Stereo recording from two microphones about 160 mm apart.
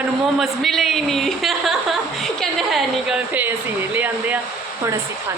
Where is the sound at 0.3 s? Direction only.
Centre (ahead or behind).